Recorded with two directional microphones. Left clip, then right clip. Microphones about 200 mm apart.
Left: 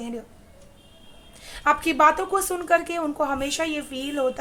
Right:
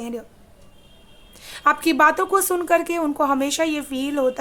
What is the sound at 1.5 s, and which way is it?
A woman's voice, 35° right (ahead or behind).